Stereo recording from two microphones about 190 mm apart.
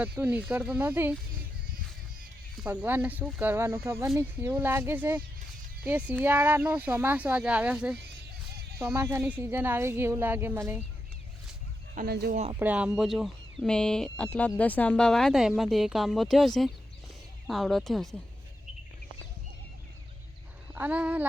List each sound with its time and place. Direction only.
0.0 s speech: 10° right (ahead or behind)
2.6 s speech: 10° right (ahead or behind)
11.9 s speech: 55° right (ahead or behind)
12.5 s speech: 10° right (ahead or behind)
20.7 s speech: 10° right (ahead or behind)